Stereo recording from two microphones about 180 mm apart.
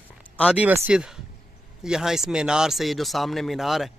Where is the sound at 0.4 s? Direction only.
5° right (ahead or behind).